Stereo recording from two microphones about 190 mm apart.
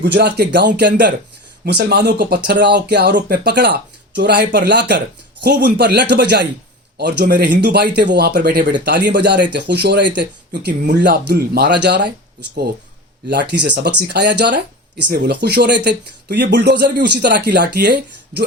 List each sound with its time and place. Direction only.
0.0 s speech: 60° right (ahead or behind)